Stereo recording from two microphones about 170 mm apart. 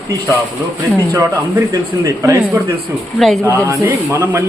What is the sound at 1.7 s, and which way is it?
Speech, 20° right (ahead or behind).